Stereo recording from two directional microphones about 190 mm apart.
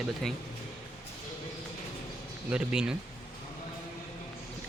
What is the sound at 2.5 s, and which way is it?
Speech, 5° right (ahead or behind).